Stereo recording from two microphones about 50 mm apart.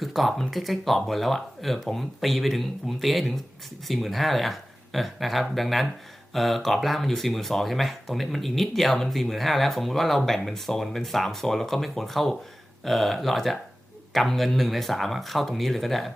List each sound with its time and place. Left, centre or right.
0.0 s speech: centre